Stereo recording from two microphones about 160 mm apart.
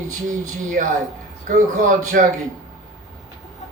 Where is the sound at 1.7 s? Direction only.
55° right (ahead or behind).